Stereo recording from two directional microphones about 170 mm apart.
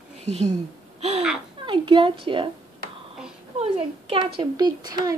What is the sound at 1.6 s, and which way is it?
Speech, 30° right (ahead or behind).